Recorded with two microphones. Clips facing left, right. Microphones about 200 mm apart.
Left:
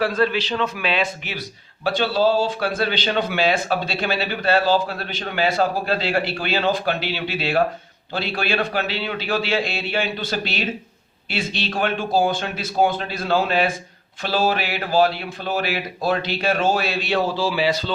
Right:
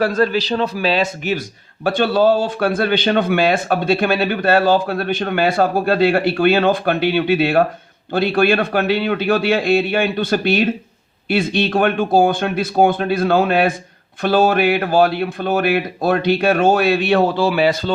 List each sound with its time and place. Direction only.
0.0 s a man's voice: 45° right (ahead or behind)